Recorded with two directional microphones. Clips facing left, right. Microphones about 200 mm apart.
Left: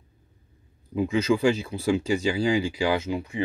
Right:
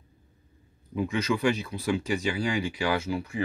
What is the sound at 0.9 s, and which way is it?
Speech, 25° left (ahead or behind).